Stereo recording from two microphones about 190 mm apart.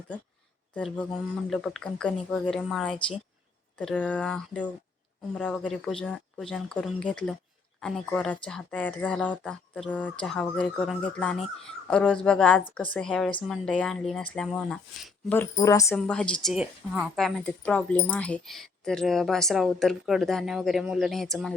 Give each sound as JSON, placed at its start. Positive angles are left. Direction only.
{"t": 0.7, "sound": "speech", "side_deg": 5}
{"t": 15.5, "sound": "speech", "side_deg": 15}
{"t": 16.0, "sound": "speech", "side_deg": 5}